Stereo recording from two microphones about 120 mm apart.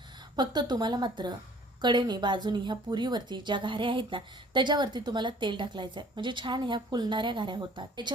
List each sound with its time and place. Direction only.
0.3 s a woman's voice: 35° right (ahead or behind)